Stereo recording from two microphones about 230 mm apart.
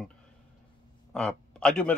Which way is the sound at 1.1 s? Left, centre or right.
Centre.